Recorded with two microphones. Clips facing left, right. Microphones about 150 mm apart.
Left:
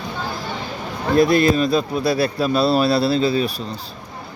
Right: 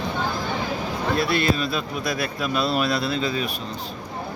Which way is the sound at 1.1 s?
45° left (ahead or behind).